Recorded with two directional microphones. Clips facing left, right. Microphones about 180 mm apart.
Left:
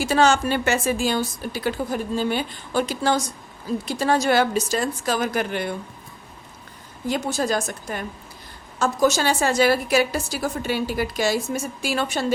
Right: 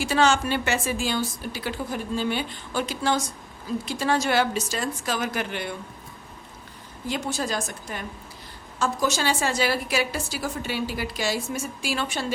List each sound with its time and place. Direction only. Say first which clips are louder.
0.0 s a woman's voice: left 3 dB; 40° left (ahead or behind)
7.1 s a woman's voice: left 5 dB; 45° left (ahead or behind)